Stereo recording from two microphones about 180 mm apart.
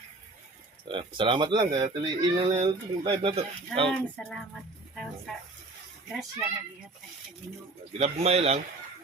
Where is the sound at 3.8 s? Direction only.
5° left (ahead or behind).